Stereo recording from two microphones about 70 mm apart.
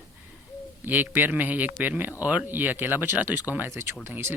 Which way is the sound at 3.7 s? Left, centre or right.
Right.